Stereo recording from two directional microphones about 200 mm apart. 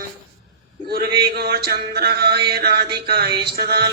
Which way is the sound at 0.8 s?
50° right (ahead or behind).